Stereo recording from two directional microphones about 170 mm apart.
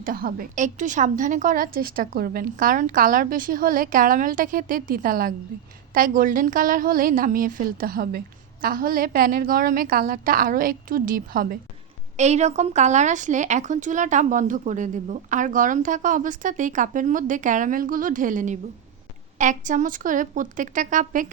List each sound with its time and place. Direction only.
0.0 s a woman's voice: 60° right (ahead or behind)
12.1 s a woman's voice: 40° right (ahead or behind)